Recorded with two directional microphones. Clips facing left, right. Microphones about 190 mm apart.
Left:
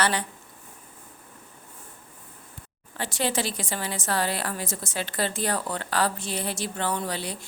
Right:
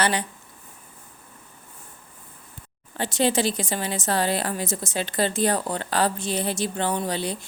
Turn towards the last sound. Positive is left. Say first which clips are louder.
# right 4 dB
turn(degrees=-20)  # may be behind; listen again after turning